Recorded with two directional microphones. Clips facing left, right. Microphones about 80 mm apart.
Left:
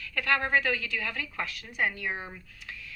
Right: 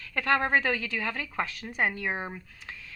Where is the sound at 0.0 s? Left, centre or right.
Right.